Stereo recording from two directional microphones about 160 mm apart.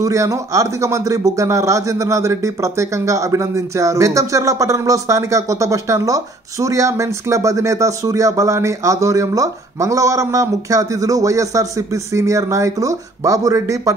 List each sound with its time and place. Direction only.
0.0 s speech: 20° right (ahead or behind)